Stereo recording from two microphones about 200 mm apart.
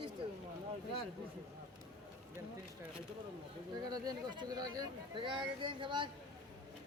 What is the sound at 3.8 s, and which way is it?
Speech, 20° right (ahead or behind).